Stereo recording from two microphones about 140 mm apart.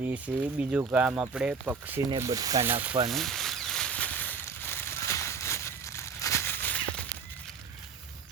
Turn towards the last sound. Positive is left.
turn(degrees=10)  # may be behind; listen again after turning